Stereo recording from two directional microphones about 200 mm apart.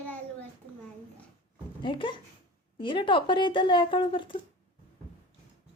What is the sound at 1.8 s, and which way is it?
Speech, 25° left (ahead or behind).